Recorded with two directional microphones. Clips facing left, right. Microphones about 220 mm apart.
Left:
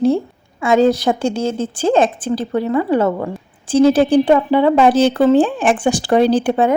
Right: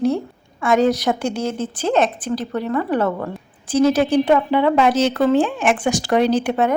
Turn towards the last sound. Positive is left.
turn(degrees=30)  # may be behind; listen again after turning